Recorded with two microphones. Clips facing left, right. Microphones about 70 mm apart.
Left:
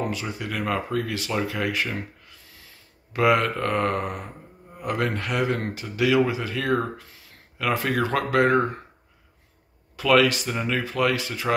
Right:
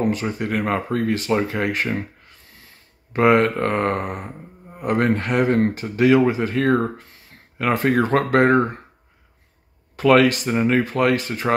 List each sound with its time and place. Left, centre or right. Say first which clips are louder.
0.0 s speech: right 7 dB; right
9.9 s speech: right 4 dB; right